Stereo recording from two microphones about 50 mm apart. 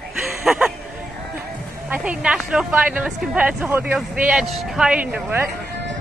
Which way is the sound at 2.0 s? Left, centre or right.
Centre.